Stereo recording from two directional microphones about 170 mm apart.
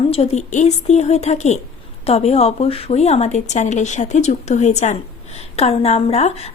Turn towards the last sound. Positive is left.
turn(degrees=40)  # may be behind; listen again after turning